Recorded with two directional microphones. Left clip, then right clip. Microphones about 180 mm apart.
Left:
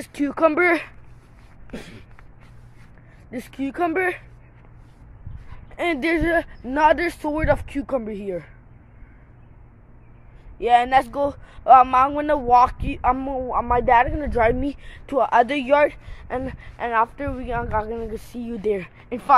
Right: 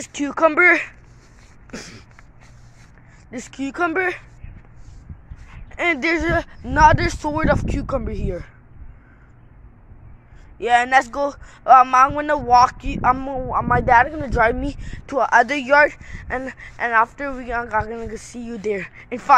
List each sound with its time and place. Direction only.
0.0 s a man's voice: 15° left (ahead or behind)
1.7 s a sound: 5° left (ahead or behind)
3.3 s a man's voice: 15° left (ahead or behind)
5.7 s a man's voice: 10° left (ahead or behind)
10.6 s a man's voice: 5° left (ahead or behind)